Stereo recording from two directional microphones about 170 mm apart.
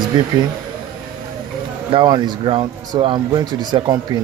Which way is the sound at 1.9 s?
30° right (ahead or behind).